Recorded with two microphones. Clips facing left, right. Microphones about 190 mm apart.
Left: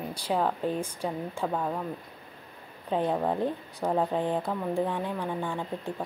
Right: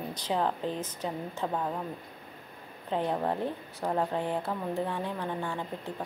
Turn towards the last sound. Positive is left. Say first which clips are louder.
# left 3 dB
turn(degrees=15)  # may be behind; listen again after turning